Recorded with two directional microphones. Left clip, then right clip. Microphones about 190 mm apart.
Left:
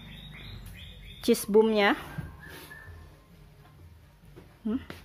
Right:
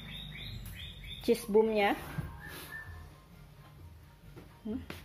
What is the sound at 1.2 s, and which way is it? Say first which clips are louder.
Speech: left 5 dB; 30° left (ahead or behind).